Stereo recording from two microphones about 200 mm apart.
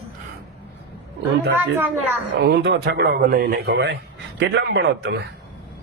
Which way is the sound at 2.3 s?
55° right (ahead or behind).